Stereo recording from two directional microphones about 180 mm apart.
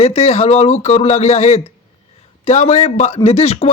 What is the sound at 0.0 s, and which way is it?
A man's voice, 35° left (ahead or behind).